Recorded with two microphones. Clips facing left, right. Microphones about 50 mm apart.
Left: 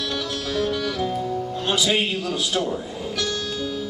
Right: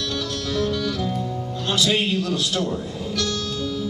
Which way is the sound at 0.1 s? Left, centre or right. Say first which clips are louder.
Even; centre.